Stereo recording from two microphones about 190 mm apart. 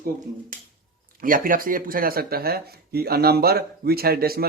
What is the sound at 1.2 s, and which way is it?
Speech, 45° right (ahead or behind).